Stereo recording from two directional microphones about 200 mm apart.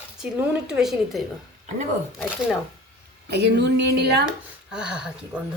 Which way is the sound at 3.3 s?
60° right (ahead or behind).